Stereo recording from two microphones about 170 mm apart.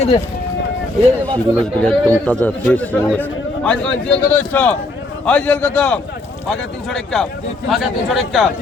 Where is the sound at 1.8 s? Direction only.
5° left (ahead or behind).